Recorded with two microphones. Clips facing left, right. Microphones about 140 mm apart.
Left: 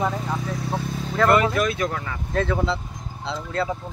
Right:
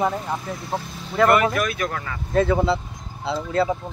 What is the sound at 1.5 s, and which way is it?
Speech, 25° left (ahead or behind).